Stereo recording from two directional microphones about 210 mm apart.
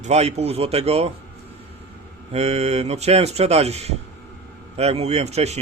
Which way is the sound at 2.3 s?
30° right (ahead or behind).